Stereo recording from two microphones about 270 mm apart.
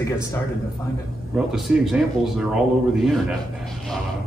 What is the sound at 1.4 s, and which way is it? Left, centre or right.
Speech, centre.